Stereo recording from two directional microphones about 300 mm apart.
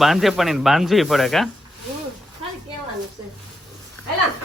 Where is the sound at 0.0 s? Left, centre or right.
Centre.